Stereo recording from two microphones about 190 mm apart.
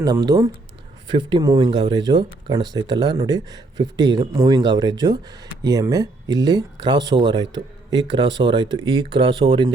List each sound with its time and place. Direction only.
0.0 s speech: 20° right (ahead or behind)